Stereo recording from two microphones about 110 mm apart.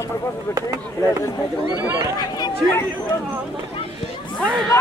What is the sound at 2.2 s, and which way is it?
Speech, 40° left (ahead or behind).